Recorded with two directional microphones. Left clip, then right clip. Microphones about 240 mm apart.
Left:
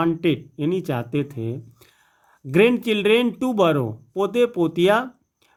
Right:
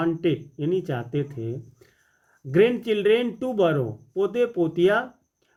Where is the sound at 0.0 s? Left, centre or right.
Left.